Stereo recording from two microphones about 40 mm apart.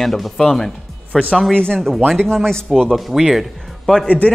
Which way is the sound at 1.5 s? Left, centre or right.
Left.